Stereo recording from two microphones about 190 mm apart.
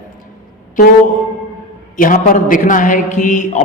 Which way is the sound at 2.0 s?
45° left (ahead or behind).